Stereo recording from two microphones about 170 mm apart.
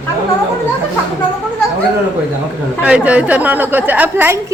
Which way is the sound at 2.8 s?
5° right (ahead or behind).